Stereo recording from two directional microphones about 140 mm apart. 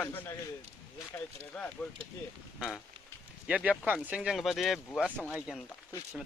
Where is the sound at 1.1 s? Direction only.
10° left (ahead or behind).